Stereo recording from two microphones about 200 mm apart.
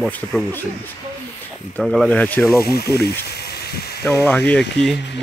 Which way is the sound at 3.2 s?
55° left (ahead or behind).